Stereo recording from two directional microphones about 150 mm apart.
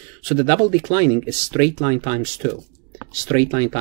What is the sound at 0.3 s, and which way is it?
Speech, 25° right (ahead or behind).